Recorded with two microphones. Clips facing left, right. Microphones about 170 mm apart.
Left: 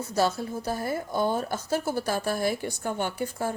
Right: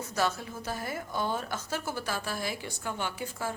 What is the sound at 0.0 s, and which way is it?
A woman's voice, 30° left (ahead or behind).